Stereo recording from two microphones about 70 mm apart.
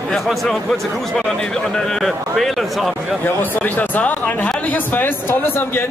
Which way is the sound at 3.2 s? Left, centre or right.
Left.